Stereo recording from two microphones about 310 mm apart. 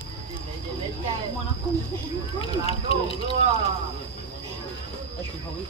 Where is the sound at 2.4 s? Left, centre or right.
Centre.